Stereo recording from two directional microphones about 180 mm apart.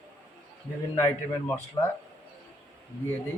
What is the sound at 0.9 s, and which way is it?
Speech, 15° left (ahead or behind).